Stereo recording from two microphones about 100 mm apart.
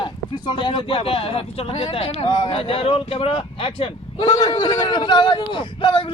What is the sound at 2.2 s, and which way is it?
Speech, 45° left (ahead or behind).